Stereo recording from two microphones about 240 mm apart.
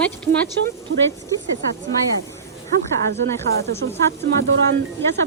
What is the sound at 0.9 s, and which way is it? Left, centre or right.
Speech, right.